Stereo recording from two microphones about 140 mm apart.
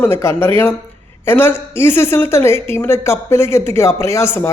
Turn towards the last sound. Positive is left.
turn(degrees=20)  # may be behind; listen again after turning